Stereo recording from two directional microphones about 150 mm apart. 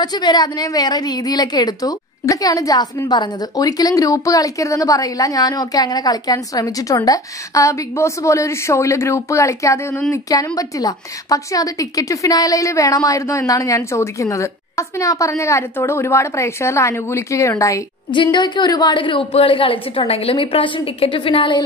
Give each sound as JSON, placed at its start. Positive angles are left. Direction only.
{"t": 0.0, "sound": "a woman's voice", "side_deg": 30}
{"t": 18.1, "sound": "a woman's voice", "side_deg": 30}